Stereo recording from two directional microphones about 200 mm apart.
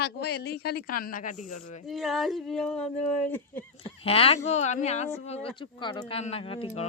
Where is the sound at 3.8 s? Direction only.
30° left (ahead or behind).